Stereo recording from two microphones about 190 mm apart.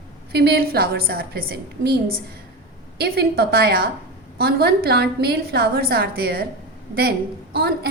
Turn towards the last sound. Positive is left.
turn(degrees=-55)  # may be behind; listen again after turning